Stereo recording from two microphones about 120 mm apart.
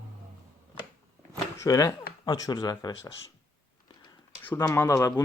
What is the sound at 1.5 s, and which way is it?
Speech, 30° left (ahead or behind).